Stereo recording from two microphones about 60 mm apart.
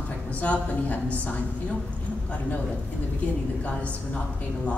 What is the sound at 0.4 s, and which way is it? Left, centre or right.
Speech, left.